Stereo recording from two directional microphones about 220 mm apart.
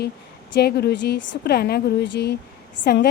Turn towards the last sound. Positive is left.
turn(degrees=45)  # may be behind; listen again after turning